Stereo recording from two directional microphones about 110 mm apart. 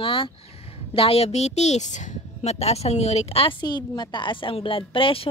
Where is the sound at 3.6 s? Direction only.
40° left (ahead or behind).